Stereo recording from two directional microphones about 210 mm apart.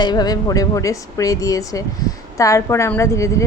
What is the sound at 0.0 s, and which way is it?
A woman's voice, 20° left (ahead or behind).